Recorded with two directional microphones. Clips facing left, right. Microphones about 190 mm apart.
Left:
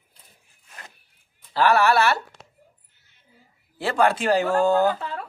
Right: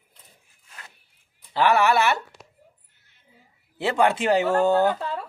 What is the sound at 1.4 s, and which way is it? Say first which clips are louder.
Speech: left 1 dB; 20° right (ahead or behind).